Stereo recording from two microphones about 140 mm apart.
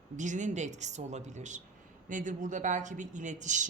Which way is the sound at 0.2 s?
60° right (ahead or behind).